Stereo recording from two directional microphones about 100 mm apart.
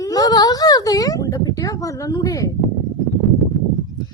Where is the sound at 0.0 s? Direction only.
40° left (ahead or behind).